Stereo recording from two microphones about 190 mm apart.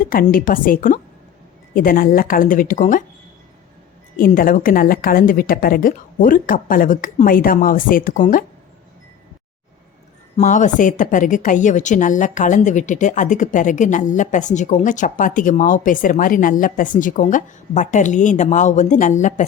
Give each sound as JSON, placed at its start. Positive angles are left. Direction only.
{"t": 0.0, "sound": "a woman's voice", "side_deg": 50}
{"t": 4.2, "sound": "a woman's voice", "side_deg": 45}
{"t": 10.3, "sound": "a woman's voice", "side_deg": 40}